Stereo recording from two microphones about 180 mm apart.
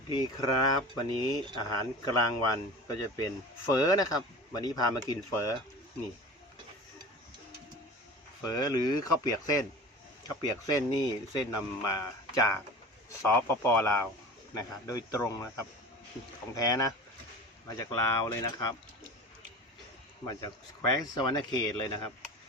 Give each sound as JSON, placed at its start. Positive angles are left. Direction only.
{"t": 0.1, "sound": "a man's voice", "side_deg": 20}
{"t": 8.4, "sound": "a man's voice", "side_deg": 20}
{"t": 16.6, "sound": "speech", "side_deg": 20}
{"t": 20.2, "sound": "speech", "side_deg": 20}